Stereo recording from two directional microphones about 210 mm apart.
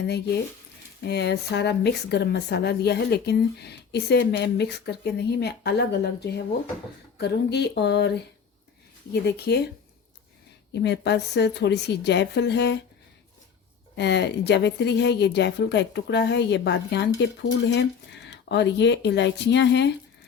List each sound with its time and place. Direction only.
1.0 s speech: 55° left (ahead or behind)
9.2 s speech: 50° left (ahead or behind)
10.8 s speech: 55° left (ahead or behind)
13.9 s speech: 55° left (ahead or behind)